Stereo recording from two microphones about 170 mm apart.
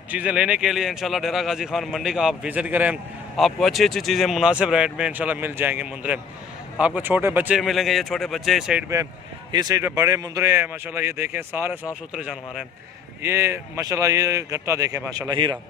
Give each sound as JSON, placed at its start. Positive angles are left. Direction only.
{"t": 0.1, "sound": "a man's voice", "side_deg": -5}
{"t": 9.5, "sound": "speech", "side_deg": -25}
{"t": 13.2, "sound": "speech", "side_deg": -15}